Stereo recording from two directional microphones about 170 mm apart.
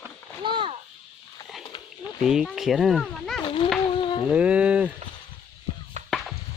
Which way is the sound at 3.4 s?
30° left (ahead or behind).